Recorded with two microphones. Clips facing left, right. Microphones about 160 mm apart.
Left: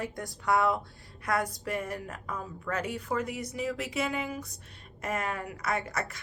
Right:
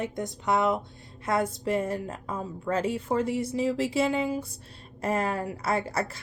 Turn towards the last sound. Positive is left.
turn(degrees=-30)  # may be behind; listen again after turning